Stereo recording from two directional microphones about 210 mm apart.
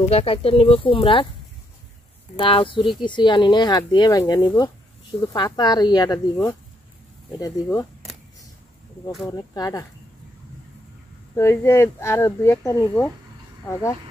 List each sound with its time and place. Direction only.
0.1 s speech: 25° left (ahead or behind)
2.3 s speech: 25° left (ahead or behind)
9.3 s speech: 20° left (ahead or behind)
11.3 s speech: 10° left (ahead or behind)